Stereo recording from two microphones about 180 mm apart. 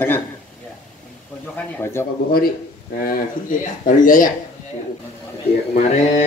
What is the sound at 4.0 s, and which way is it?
Speech, 50° left (ahead or behind).